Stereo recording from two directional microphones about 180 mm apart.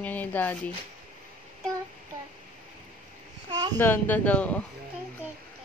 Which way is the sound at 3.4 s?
25° right (ahead or behind).